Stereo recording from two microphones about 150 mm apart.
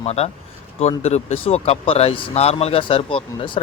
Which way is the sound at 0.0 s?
45° left (ahead or behind).